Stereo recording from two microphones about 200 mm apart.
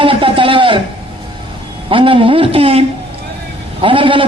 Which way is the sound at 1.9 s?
25° right (ahead or behind).